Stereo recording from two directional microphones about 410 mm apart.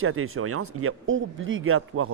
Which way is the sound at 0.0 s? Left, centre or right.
Right.